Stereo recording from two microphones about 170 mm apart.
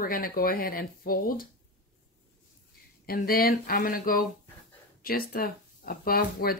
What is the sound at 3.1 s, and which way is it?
Speech, 65° left (ahead or behind).